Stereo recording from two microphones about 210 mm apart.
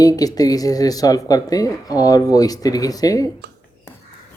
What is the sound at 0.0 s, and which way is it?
Speech, 15° left (ahead or behind).